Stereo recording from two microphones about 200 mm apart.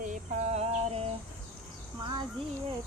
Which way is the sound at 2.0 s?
20° right (ahead or behind).